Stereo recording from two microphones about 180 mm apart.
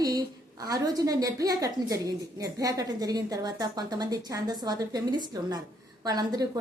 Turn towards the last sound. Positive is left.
turn(degrees=-20)  # may be behind; listen again after turning